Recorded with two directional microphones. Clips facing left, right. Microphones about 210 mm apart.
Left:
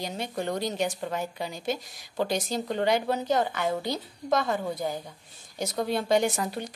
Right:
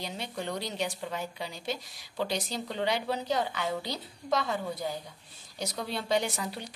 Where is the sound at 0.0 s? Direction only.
45° left (ahead or behind).